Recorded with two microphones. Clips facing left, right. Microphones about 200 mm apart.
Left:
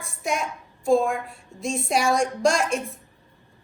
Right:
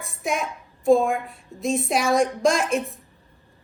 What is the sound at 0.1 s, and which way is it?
A child's voice, centre (ahead or behind).